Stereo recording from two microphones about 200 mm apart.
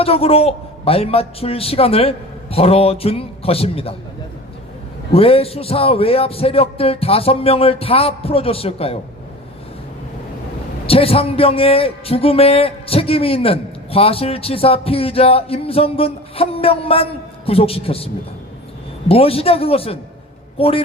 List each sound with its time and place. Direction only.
0.0 s a man's voice: 30° left (ahead or behind)
5.1 s a man's voice: 30° left (ahead or behind)
10.8 s a man's voice: 30° left (ahead or behind)